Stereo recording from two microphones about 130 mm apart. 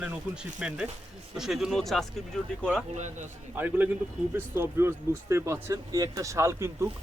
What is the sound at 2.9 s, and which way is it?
Speech, 65° right (ahead or behind).